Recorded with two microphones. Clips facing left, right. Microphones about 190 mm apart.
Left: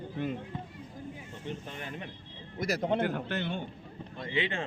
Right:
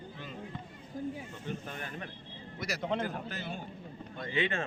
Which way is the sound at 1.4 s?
20° left (ahead or behind).